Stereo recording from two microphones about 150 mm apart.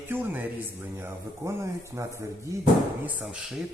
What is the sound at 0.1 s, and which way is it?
Speech, 10° right (ahead or behind).